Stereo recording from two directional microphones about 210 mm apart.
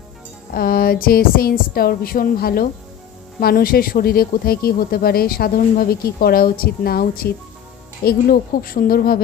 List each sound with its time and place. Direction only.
0.5 s speech: 45° left (ahead or behind)